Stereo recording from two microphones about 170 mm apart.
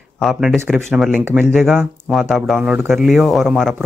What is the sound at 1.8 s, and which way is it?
Speech, centre (ahead or behind).